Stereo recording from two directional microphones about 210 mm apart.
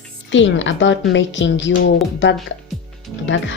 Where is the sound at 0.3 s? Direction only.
60° left (ahead or behind).